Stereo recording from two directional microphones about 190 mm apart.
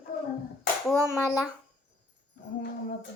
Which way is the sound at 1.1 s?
20° left (ahead or behind).